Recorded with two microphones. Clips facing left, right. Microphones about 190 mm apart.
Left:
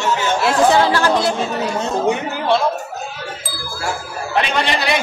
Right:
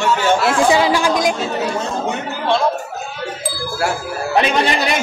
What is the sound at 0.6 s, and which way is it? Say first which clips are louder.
Speech: left 1 dB; 10° right (ahead or behind).